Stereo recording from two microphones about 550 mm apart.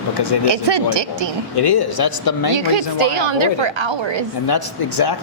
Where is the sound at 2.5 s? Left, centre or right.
Right.